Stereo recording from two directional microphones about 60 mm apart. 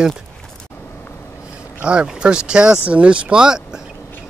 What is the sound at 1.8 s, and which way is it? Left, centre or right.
Speech, centre.